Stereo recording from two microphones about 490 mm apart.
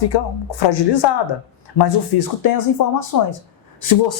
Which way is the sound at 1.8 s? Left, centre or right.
Left.